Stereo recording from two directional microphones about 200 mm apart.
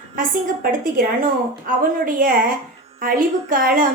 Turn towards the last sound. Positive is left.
turn(degrees=-45)  # may be behind; listen again after turning